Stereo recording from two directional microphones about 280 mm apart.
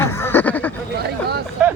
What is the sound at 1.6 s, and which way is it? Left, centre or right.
Speech, centre.